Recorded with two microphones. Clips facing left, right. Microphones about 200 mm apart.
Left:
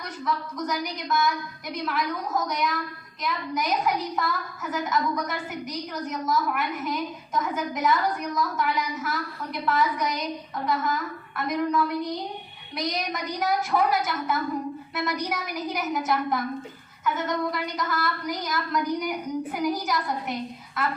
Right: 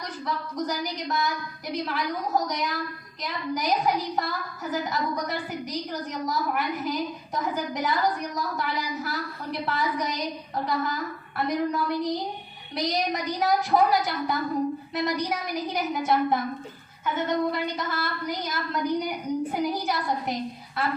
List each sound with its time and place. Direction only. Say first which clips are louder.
0.3 s a woman's voice: left 1 dB; 35° right (ahead or behind)